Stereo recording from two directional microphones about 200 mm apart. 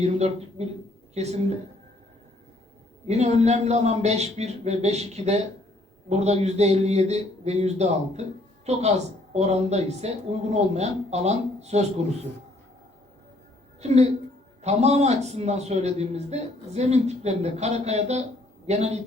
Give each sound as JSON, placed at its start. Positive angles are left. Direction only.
{"t": 0.6, "sound": "a man's voice", "side_deg": -35}
{"t": 3.1, "sound": "a man's voice", "side_deg": -35}
{"t": 13.8, "sound": "a man's voice", "side_deg": -35}